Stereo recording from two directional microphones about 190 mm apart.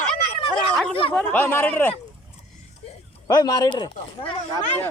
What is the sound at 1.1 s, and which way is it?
Speech, 10° left (ahead or behind).